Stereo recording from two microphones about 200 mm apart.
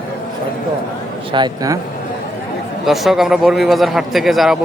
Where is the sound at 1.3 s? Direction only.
20° right (ahead or behind).